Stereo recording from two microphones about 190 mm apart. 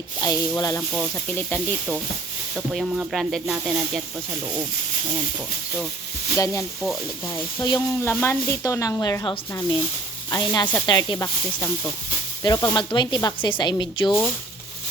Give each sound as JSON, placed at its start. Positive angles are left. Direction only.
{"t": 0.2, "sound": "speech", "side_deg": 20}
{"t": 0.9, "sound": "speech", "side_deg": 5}
{"t": 2.6, "sound": "speech", "side_deg": -5}
{"t": 6.3, "sound": "speech", "side_deg": 15}